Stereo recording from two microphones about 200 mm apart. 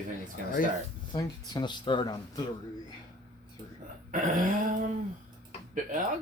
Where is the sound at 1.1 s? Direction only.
20° left (ahead or behind).